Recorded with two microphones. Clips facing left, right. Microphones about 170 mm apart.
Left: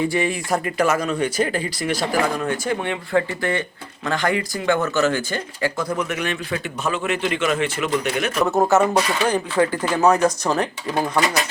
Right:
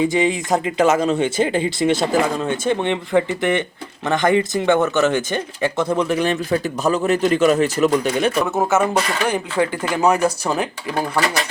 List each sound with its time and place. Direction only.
0.0 s speech: 20° right (ahead or behind)
8.4 s speech: centre (ahead or behind)